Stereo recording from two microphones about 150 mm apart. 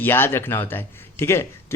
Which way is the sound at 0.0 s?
15° left (ahead or behind).